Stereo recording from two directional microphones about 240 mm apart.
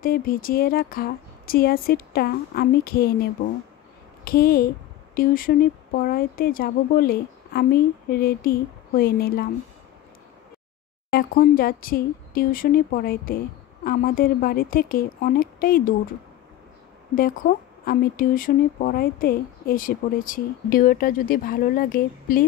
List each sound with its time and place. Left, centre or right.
0.0 s speech: left
11.1 s speech: left
17.1 s speech: left